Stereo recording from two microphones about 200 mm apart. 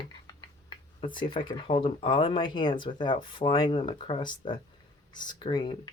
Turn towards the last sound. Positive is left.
turn(degrees=25)  # may be behind; listen again after turning